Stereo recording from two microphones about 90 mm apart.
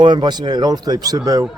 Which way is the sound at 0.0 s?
60° right (ahead or behind).